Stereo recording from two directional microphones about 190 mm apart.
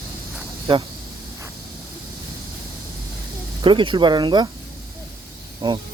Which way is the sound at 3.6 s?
25° right (ahead or behind).